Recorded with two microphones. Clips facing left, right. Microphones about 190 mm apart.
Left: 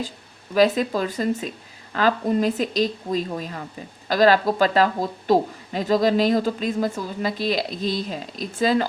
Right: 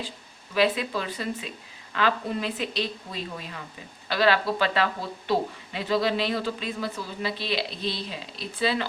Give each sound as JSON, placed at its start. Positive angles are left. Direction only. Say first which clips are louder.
{"t": 0.5, "sound": "a woman's voice", "louder": "left 6 dB", "side_deg": 40}